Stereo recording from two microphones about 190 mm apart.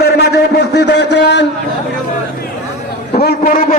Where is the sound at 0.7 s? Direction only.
65° left (ahead or behind).